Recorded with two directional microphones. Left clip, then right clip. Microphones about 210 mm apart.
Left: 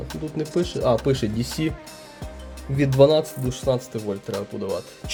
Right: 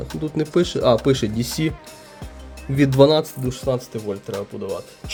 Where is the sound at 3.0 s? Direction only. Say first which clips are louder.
Right 1 dB; 10° right (ahead or behind).